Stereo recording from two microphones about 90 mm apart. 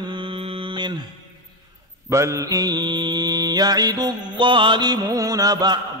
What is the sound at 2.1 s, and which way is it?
Mantra, 35° right (ahead or behind).